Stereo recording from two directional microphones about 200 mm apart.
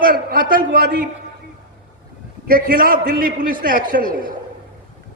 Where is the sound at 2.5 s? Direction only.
45° right (ahead or behind).